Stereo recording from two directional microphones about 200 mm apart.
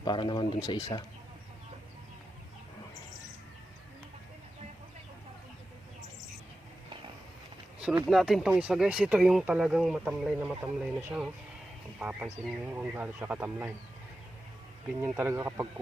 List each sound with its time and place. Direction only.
0.0 s a man's voice: 20° left (ahead or behind)
8.0 s speech: centre (ahead or behind)
15.0 s speech: 10° right (ahead or behind)